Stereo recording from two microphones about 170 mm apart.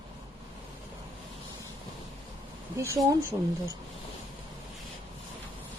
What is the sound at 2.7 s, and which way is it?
Speech, 20° right (ahead or behind).